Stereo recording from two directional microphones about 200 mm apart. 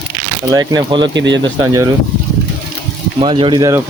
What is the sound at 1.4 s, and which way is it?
Speech, 15° right (ahead or behind).